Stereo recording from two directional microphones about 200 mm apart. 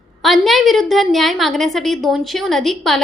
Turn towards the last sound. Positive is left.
turn(degrees=0)  # may be behind; listen again after turning